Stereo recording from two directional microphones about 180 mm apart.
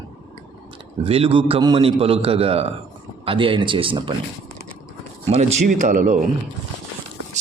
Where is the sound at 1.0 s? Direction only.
30° right (ahead or behind).